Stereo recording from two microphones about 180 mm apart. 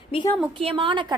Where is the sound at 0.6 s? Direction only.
30° right (ahead or behind).